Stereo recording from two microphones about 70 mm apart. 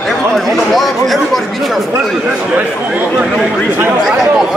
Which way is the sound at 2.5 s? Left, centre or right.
Centre.